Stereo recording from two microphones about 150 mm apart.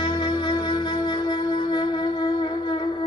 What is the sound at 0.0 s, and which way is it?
Music, 30° left (ahead or behind).